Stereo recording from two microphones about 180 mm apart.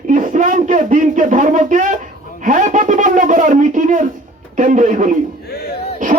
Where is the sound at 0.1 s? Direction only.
45° right (ahead or behind).